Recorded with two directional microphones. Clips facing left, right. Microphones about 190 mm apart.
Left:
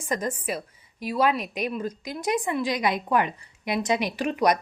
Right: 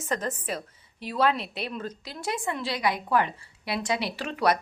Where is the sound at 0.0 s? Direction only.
10° left (ahead or behind).